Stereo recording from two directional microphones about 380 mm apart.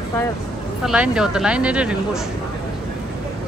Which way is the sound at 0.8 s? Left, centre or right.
Centre.